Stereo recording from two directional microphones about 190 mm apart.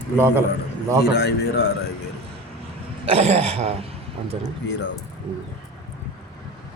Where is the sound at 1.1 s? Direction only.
60° left (ahead or behind).